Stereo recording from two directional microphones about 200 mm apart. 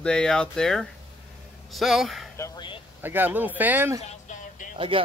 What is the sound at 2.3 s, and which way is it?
Speech, 20° left (ahead or behind).